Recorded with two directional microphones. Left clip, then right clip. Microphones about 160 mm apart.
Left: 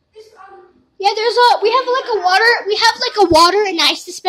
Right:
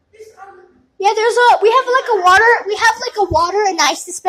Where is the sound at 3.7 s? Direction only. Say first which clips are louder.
Right 1 dB; centre (ahead or behind).